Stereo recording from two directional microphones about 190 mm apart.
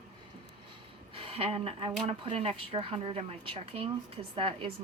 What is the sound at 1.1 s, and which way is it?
Speech, 30° right (ahead or behind).